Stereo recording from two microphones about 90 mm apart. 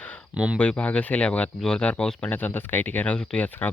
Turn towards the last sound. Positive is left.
turn(degrees=15)  # may be behind; listen again after turning